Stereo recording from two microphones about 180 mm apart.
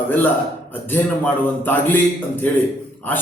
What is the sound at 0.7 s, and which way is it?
A man's voice, 10° left (ahead or behind).